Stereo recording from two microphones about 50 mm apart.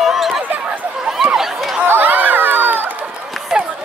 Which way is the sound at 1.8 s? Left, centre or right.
Right.